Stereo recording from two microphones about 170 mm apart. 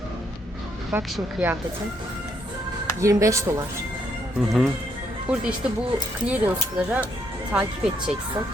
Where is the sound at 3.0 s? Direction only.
20° right (ahead or behind).